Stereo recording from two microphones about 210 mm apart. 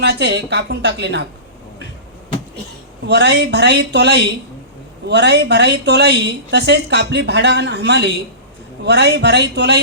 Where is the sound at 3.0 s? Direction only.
55° right (ahead or behind).